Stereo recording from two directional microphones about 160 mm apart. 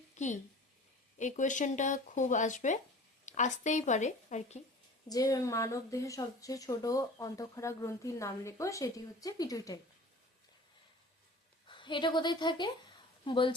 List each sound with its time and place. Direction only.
0.2 s a sound: 50° left (ahead or behind)
1.2 s speech: 50° left (ahead or behind)
5.0 s speech: 20° left (ahead or behind)
11.7 s a woman's voice: 30° left (ahead or behind)